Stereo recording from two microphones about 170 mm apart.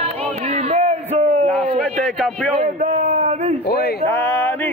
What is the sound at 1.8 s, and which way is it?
Speech, 5° left (ahead or behind).